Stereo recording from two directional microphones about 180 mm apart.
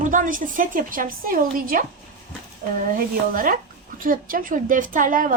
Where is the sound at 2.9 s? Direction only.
50° right (ahead or behind).